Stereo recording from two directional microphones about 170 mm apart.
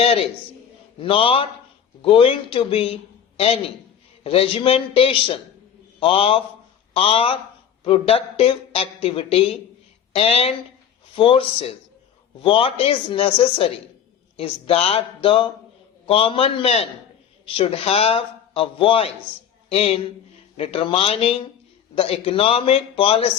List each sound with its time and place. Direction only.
0.0 s a man's voice: 35° left (ahead or behind)